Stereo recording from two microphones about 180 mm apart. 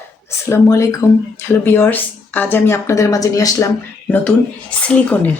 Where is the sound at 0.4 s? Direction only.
15° left (ahead or behind).